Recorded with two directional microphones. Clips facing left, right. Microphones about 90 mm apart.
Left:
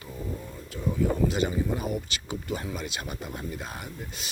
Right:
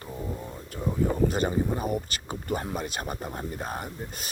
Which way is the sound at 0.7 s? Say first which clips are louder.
Right 1 dB; 30° right (ahead or behind).